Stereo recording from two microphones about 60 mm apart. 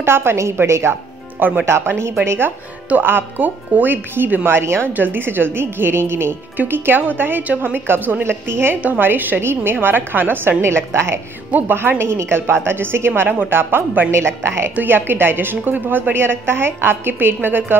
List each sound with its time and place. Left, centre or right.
0.0 s a woman's voice: right
1.4 s speech: right
1.7 s a woman's voice: right
4.6 s a woman's voice: right
4.9 s speech: right
6.5 s speech: right
10.9 s a woman's voice: right
11.5 s speech: right